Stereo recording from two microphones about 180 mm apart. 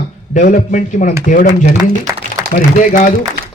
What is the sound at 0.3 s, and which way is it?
Speech, 45° left (ahead or behind).